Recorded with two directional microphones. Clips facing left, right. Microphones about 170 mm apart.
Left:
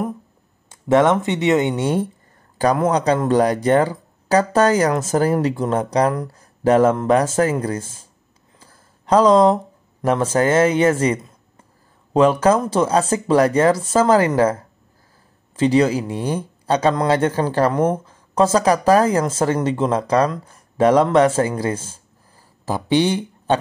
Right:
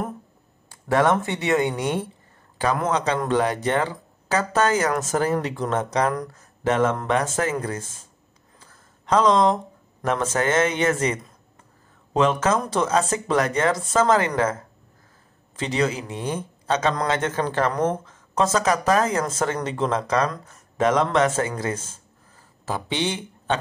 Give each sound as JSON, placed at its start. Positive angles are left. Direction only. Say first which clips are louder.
{"t": 0.7, "sound": "speech", "louder": "left 5 dB", "side_deg": 20}
{"t": 2.6, "sound": "speech", "louder": "left 5 dB", "side_deg": 35}
{"t": 8.5, "sound": "a sound", "louder": "left 3 dB", "side_deg": 35}
{"t": 10.0, "sound": "speech", "louder": "left 5 dB", "side_deg": 30}